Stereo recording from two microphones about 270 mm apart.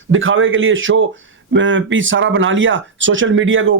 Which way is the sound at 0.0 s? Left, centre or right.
Right.